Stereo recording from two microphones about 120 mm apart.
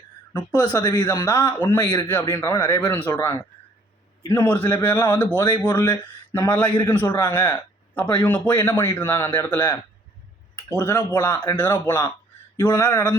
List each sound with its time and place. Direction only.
0.3 s a man's voice: 20° left (ahead or behind)
10.8 s a man's voice: 25° left (ahead or behind)